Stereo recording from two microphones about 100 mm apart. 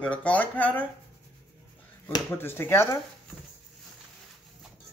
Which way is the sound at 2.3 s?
25° left (ahead or behind).